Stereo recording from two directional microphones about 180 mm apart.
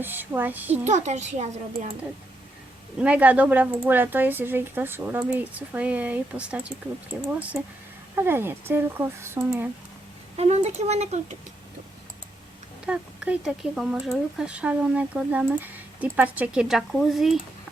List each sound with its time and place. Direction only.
0.0 s speech: 10° right (ahead or behind)
0.9 s a child's voice: 40° right (ahead or behind)
3.0 s speech: 5° right (ahead or behind)
10.3 s a child's voice: 35° right (ahead or behind)
12.8 s speech: 5° right (ahead or behind)